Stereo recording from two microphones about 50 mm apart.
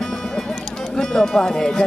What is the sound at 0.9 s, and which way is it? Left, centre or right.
Speech, centre.